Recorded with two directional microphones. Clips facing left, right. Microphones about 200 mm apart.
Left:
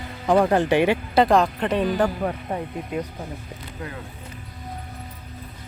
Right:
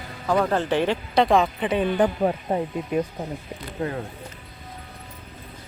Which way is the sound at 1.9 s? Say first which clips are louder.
Right 2 dB; 20° right (ahead or behind).